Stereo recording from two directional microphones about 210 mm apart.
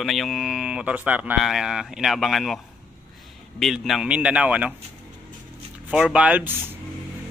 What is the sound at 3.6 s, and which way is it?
Speech, centre (ahead or behind).